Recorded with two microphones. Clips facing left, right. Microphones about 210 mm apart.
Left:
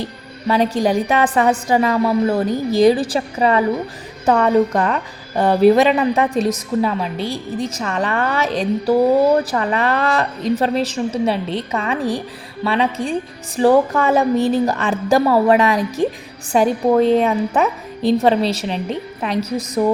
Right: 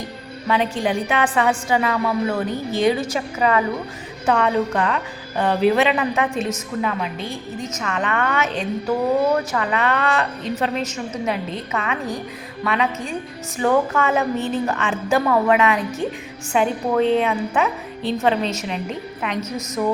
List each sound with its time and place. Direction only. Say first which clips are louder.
0.0 s a woman's voice: left 5 dB; 35° left (ahead or behind)